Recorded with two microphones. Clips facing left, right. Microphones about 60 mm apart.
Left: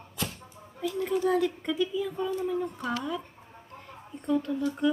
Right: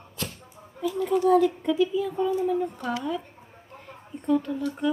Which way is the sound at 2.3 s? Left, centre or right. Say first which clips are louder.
Right 5 dB; centre.